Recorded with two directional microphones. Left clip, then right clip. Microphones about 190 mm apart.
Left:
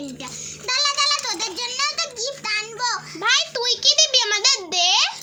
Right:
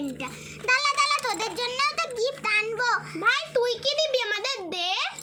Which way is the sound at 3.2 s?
35° left (ahead or behind).